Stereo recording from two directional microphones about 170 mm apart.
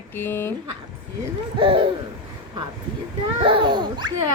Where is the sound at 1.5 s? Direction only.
30° right (ahead or behind).